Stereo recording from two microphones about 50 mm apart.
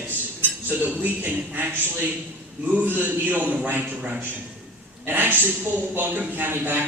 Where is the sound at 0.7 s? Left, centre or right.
Right.